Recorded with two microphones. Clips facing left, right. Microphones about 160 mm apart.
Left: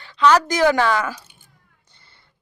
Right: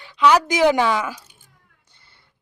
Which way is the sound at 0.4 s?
20° right (ahead or behind).